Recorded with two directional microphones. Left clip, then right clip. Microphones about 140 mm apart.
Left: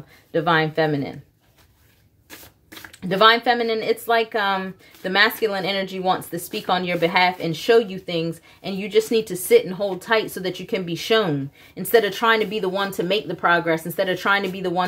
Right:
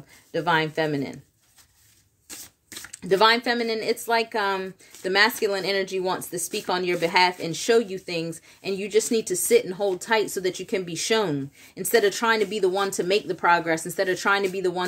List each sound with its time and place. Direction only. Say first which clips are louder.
0.3 s speech: left 4 dB; 35° right (ahead or behind)
3.1 s speech: left 4 dB; 35° right (ahead or behind)